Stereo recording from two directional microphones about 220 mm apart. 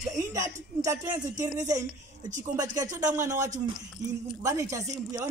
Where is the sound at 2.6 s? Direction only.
15° right (ahead or behind).